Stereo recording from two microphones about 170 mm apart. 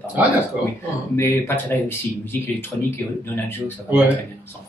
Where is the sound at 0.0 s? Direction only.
10° right (ahead or behind).